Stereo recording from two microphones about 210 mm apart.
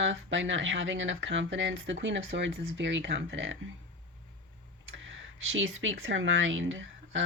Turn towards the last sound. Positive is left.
turn(degrees=-65)  # may be behind; listen again after turning